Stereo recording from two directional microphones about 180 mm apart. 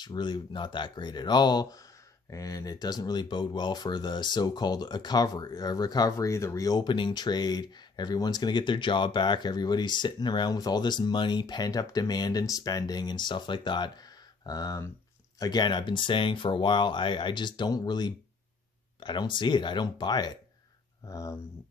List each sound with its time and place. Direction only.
0.0 s speech: 25° left (ahead or behind)